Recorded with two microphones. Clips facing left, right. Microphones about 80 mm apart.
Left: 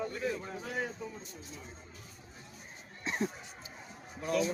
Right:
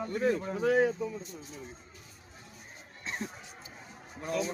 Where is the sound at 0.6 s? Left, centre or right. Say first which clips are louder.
Right 15 dB; right.